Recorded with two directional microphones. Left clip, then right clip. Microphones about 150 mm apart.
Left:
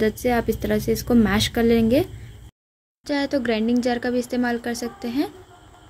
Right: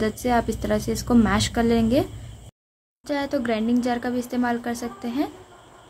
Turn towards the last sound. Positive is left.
turn(degrees=15)  # may be behind; listen again after turning